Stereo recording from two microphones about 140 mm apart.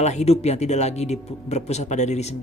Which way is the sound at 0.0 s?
55° left (ahead or behind).